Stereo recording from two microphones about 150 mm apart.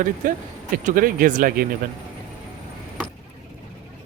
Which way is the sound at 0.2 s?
65° right (ahead or behind).